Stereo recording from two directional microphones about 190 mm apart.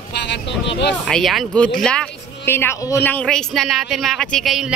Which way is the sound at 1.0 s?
Centre (ahead or behind).